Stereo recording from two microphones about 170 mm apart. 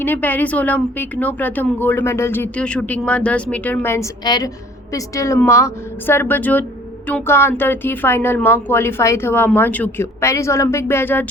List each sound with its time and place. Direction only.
0.0 s a woman's voice: 10° left (ahead or behind)
4.2 s a woman's voice: 25° left (ahead or behind)